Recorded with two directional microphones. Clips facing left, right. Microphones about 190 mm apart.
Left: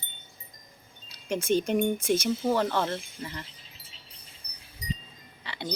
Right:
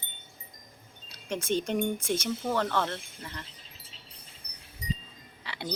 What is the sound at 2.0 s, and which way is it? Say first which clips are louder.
Speech: left 5 dB; 5° left (ahead or behind).